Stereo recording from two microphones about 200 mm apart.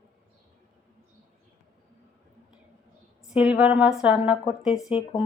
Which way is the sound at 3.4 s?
5° right (ahead or behind).